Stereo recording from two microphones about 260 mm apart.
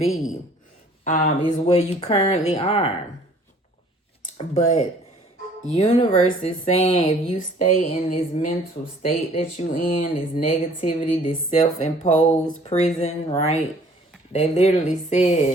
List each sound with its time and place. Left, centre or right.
1.0 s speech: left
4.2 s speech: left